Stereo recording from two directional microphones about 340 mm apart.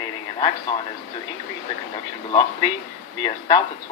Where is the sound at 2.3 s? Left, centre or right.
Centre.